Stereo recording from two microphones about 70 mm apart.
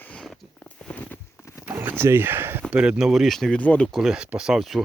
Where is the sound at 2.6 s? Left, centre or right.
Centre.